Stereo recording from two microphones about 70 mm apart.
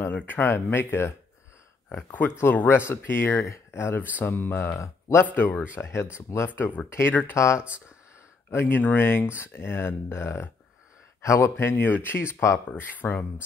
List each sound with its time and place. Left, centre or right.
0.1 s speech: left
4.7 s speech: left
5.2 s speech: left
5.8 s speech: left
6.9 s speech: left
8.5 s speech: left
11.5 s speech: left
12.9 s speech: left